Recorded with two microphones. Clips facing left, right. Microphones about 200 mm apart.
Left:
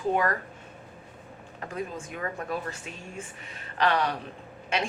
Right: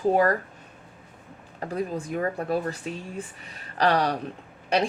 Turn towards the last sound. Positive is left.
turn(degrees=-35)  # may be behind; listen again after turning